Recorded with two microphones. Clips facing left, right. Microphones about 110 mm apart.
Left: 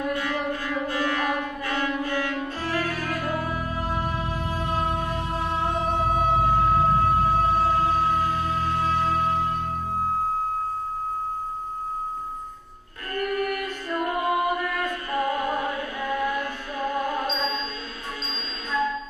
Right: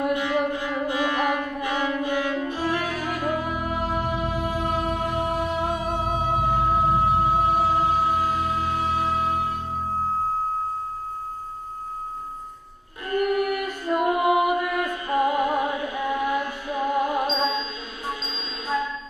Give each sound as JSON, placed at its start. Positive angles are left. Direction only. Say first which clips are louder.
{"t": 0.0, "sound": "music", "louder": "right 4 dB", "side_deg": -15}
{"t": 13.1, "sound": "music", "louder": "right 4 dB", "side_deg": -15}